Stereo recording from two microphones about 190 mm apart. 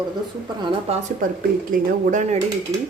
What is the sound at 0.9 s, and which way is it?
Speech, 30° right (ahead or behind).